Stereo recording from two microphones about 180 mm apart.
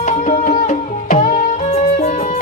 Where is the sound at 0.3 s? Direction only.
45° left (ahead or behind).